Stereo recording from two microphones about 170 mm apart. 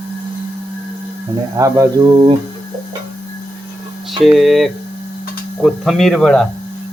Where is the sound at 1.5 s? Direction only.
20° right (ahead or behind).